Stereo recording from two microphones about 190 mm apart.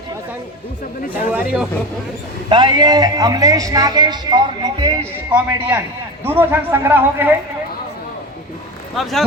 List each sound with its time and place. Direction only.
1.3 s a man's voice: 10° right (ahead or behind)
2.5 s a man's voice: 25° right (ahead or behind)
5.3 s a man's voice: 10° right (ahead or behind)
9.0 s speech: centre (ahead or behind)